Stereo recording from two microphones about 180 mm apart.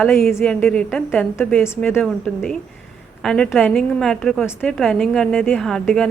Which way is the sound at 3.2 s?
Centre (ahead or behind).